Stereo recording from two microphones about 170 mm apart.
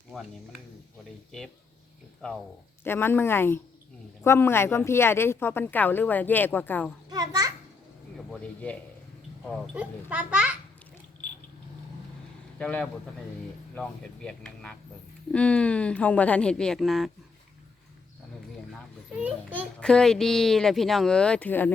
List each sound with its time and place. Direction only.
0.1 s speech: centre (ahead or behind)
2.8 s speech: 15° left (ahead or behind)
7.1 s a sound: 20° right (ahead or behind)
8.3 s a man's voice: 10° left (ahead or behind)
9.7 s a child's voice: 10° right (ahead or behind)
12.5 s speech: 5° left (ahead or behind)
19.2 s a child's voice: 10° right (ahead or behind)
19.8 s speech: 5° left (ahead or behind)